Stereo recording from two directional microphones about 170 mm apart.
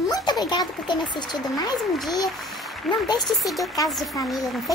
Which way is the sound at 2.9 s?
Centre (ahead or behind).